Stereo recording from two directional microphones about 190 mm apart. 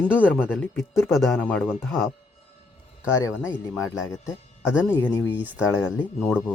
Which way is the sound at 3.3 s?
5° right (ahead or behind).